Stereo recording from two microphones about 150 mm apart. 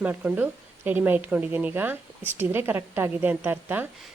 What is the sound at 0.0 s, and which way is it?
A woman's voice, 10° right (ahead or behind).